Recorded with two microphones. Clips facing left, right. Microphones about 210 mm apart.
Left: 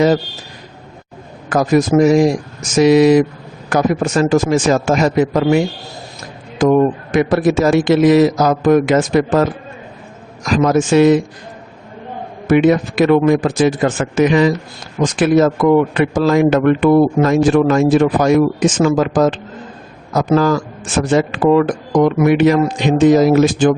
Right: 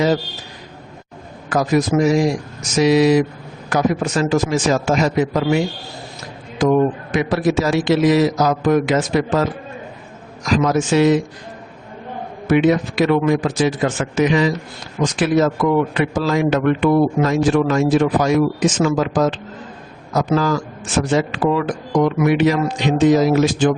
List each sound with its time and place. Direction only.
1.5 s a man's voice: 50° left (ahead or behind)
12.5 s a man's voice: 50° left (ahead or behind)
21.1 s a man's voice: 50° left (ahead or behind)